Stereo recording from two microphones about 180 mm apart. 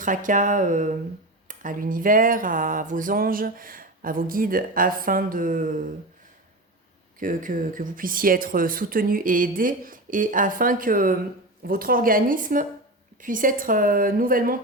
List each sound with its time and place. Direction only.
0.0 s speech: 45° right (ahead or behind)
7.2 s speech: 50° right (ahead or behind)